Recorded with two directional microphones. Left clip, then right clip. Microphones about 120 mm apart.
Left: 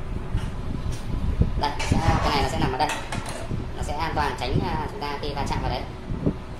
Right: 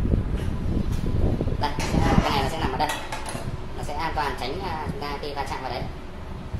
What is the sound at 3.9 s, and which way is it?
Speech, 15° left (ahead or behind).